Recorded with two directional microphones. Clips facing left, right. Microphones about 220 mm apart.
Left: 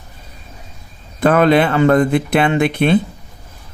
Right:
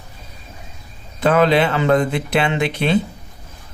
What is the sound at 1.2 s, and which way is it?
Speech, 55° left (ahead or behind).